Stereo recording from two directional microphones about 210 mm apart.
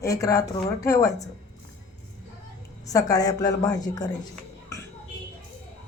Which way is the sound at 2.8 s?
15° left (ahead or behind).